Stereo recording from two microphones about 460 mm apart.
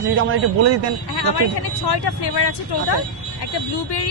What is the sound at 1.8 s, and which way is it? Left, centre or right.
Speech, left.